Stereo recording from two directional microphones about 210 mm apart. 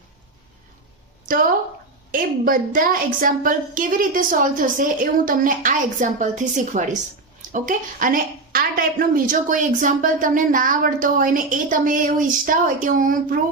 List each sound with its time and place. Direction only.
1.3 s a woman's voice: 40° right (ahead or behind)